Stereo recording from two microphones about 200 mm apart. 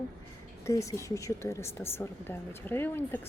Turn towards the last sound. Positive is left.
turn(degrees=10)  # may be behind; listen again after turning